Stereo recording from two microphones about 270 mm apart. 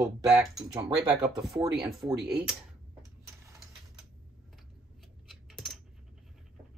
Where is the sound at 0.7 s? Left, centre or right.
Centre.